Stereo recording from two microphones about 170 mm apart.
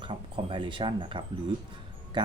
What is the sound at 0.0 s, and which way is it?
Speech, 30° right (ahead or behind).